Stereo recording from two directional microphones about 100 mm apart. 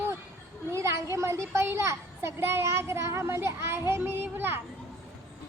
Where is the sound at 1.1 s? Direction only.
30° right (ahead or behind).